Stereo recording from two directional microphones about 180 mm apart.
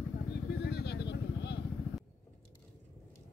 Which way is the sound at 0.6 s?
65° left (ahead or behind).